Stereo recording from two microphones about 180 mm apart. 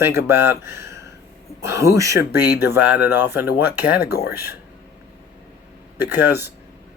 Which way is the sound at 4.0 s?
65° left (ahead or behind).